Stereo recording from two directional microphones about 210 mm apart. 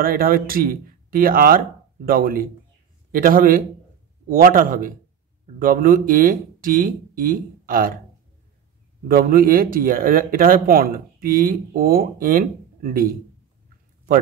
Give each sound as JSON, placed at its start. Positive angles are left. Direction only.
{"t": 0.0, "sound": "speech", "side_deg": -45}
{"t": 9.0, "sound": "speech", "side_deg": -45}